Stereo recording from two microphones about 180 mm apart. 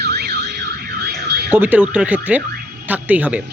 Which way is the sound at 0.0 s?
65° right (ahead or behind).